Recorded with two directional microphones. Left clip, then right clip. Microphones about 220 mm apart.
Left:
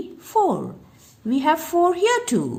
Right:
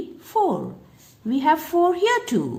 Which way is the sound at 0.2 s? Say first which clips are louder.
Left 2 dB; 15° left (ahead or behind).